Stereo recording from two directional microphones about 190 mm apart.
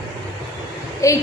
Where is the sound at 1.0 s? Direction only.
15° left (ahead or behind).